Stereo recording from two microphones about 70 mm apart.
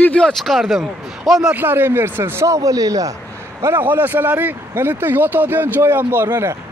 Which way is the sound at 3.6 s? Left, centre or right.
Right.